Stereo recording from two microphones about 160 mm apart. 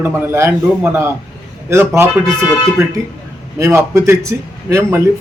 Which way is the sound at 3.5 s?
15° right (ahead or behind).